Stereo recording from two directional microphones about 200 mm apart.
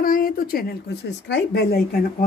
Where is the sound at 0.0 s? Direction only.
45° left (ahead or behind).